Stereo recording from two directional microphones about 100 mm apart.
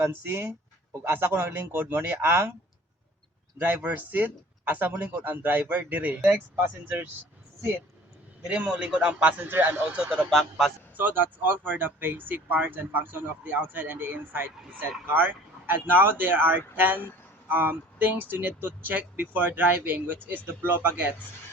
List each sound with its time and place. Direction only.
0.0 s speech: 20° right (ahead or behind)
3.6 s speech: 20° right (ahead or behind)
8.4 s speech: 15° right (ahead or behind)
10.2 s a man's voice: 5° left (ahead or behind)
10.9 s speech: 20° right (ahead or behind)